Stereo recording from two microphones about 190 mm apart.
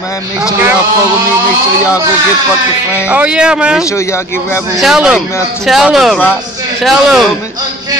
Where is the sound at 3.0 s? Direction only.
5° right (ahead or behind).